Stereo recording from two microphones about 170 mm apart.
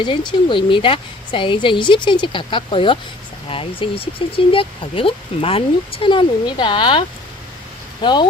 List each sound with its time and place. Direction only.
0.0 s a woman's voice: 25° left (ahead or behind)
8.0 s a woman's voice: 25° left (ahead or behind)